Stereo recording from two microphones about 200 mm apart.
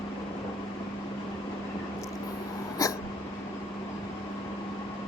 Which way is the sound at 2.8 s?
15° left (ahead or behind).